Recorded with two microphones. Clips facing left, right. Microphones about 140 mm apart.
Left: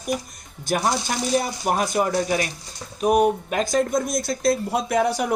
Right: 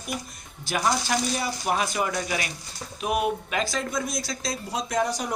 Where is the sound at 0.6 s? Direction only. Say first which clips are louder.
Left 3 dB; 50° left (ahead or behind).